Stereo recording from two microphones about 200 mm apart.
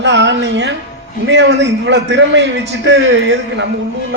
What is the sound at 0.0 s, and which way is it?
A man's voice, 65° right (ahead or behind).